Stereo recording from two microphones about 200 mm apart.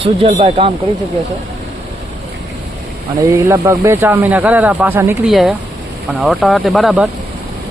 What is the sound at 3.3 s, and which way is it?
Speech, 15° right (ahead or behind).